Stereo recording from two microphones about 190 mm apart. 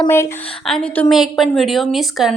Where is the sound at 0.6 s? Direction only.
5° left (ahead or behind).